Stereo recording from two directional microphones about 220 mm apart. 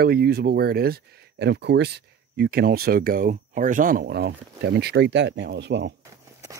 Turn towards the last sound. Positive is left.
turn(degrees=-50)  # may be behind; listen again after turning